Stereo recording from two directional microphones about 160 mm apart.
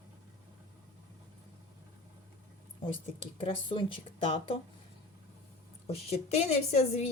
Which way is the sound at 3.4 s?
35° left (ahead or behind).